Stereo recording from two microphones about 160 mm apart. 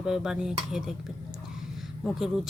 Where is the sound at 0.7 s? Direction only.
5° right (ahead or behind).